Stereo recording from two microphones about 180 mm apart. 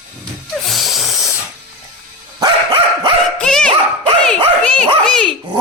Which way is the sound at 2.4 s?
25° right (ahead or behind).